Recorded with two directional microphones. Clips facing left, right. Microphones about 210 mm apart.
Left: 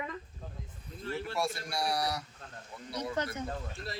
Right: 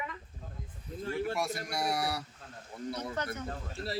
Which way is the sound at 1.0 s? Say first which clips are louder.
Right 4 dB; 45° right (ahead or behind).